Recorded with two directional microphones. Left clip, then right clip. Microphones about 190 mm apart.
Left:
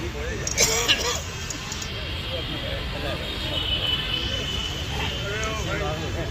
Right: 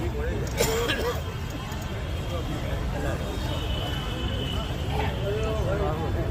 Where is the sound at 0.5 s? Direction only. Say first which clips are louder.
Left 5 dB; 60° right (ahead or behind).